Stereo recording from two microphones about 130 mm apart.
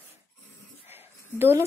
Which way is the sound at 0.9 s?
20° right (ahead or behind).